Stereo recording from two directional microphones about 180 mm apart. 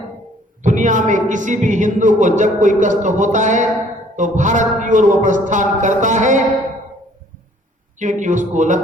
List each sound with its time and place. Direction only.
0.6 s a woman's voice: 45° right (ahead or behind)
7.9 s a woman's voice: 45° right (ahead or behind)